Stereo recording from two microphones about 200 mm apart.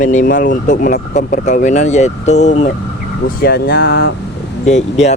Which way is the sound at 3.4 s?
50° left (ahead or behind).